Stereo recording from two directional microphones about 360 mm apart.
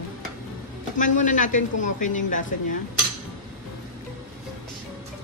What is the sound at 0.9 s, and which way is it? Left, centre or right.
A woman's voice, left.